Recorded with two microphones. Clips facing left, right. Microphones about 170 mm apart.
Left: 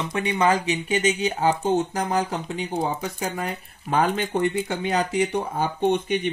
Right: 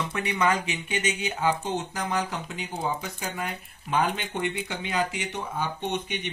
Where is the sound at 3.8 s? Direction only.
40° left (ahead or behind).